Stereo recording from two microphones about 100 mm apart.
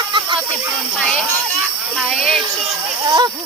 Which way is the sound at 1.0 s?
5° left (ahead or behind).